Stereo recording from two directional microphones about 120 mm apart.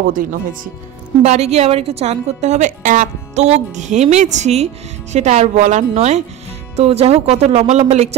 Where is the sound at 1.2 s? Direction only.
65° right (ahead or behind).